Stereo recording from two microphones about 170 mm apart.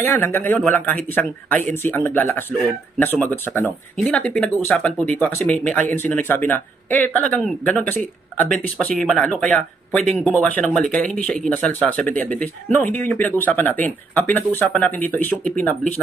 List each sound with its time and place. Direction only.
0.0 s speech: 10° left (ahead or behind)